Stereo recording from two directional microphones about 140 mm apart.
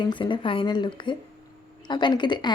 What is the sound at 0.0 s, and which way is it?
A woman's voice, 35° left (ahead or behind).